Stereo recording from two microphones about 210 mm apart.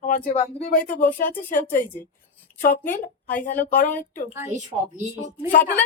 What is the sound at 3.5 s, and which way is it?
Speech, 40° left (ahead or behind).